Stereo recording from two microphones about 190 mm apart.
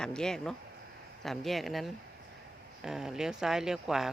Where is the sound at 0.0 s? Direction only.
5° left (ahead or behind).